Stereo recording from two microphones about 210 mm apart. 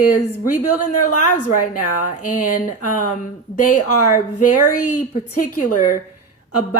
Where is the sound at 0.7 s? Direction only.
90° left.